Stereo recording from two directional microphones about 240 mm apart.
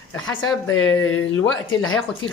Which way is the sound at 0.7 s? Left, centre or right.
Left.